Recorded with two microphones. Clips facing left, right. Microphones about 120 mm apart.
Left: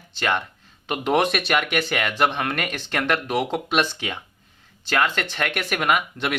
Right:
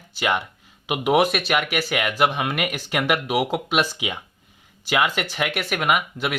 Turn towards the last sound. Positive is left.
turn(degrees=-5)  # may be behind; listen again after turning